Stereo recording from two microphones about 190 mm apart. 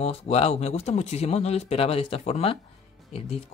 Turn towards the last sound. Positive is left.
turn(degrees=30)  # may be behind; listen again after turning